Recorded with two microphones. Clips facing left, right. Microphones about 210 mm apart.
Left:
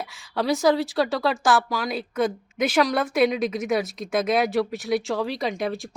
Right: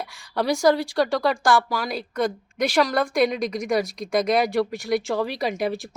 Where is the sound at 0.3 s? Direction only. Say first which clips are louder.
Right 1 dB; centre (ahead or behind).